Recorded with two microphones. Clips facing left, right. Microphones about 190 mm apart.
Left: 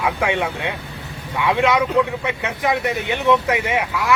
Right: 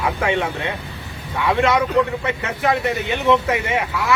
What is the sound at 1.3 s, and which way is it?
Speech, centre (ahead or behind).